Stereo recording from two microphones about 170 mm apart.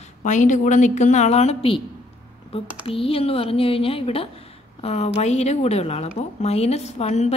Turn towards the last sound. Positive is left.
turn(degrees=40)  # may be behind; listen again after turning